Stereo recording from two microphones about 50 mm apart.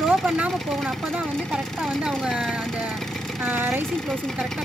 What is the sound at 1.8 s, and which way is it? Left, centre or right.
Speech, centre.